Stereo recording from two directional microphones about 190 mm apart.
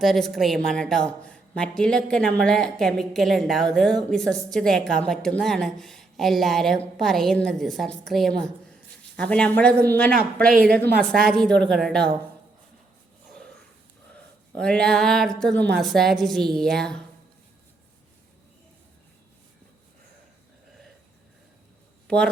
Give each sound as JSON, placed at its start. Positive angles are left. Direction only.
{"t": 0.0, "sound": "a woman's voice", "side_deg": 0}
{"t": 10.5, "sound": "a woman's voice", "side_deg": -50}
{"t": 11.1, "sound": "a woman's voice", "side_deg": 0}
{"t": 13.3, "sound": "a sound", "side_deg": 5}
{"t": 14.5, "sound": "a woman's voice", "side_deg": 5}
{"t": 22.0, "sound": "a sound", "side_deg": 5}